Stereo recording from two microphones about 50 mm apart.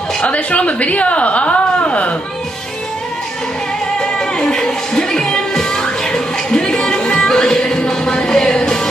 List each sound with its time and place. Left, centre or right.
0.2 s a woman's voice: left
4.0 s music: centre